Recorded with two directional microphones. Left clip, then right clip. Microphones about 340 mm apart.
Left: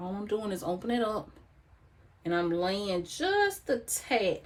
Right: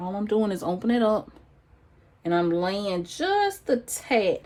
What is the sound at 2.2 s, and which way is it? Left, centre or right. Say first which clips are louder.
Speech: right 5 dB; right.